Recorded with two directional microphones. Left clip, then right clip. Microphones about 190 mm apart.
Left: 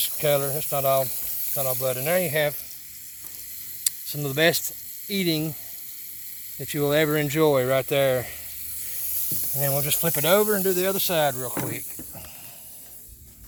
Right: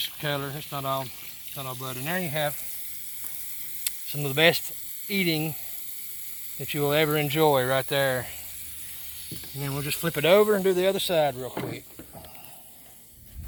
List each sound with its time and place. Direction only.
0.0 s speech: 45° left (ahead or behind)
3.8 s speech: 15° left (ahead or behind)
6.6 s speech: 20° left (ahead or behind)
9.6 s speech: 50° left (ahead or behind)
10.1 s speech: 25° left (ahead or behind)
11.0 s speech: 45° left (ahead or behind)